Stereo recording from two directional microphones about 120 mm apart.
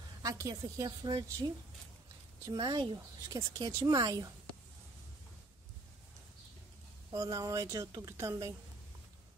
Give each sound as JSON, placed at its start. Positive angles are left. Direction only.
{"t": 0.2, "sound": "speech", "side_deg": -30}
{"t": 2.5, "sound": "speech", "side_deg": -35}
{"t": 7.1, "sound": "a woman's voice", "side_deg": -30}